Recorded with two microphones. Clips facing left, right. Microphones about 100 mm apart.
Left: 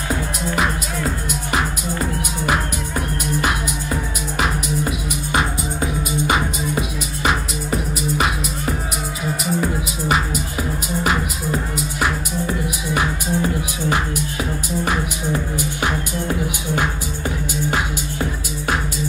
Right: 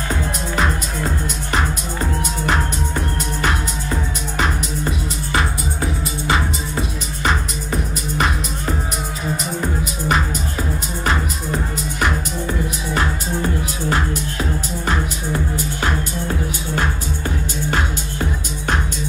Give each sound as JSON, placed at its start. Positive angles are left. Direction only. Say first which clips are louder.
{"t": 5.3, "sound": "music", "louder": "left 1 dB", "side_deg": 20}
{"t": 10.0, "sound": "music", "louder": "even", "side_deg": 5}
{"t": 12.9, "sound": "music", "louder": "left 1 dB", "side_deg": 15}